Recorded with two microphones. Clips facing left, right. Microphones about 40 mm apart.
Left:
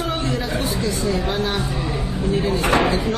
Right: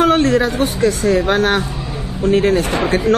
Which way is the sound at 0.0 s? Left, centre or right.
Right.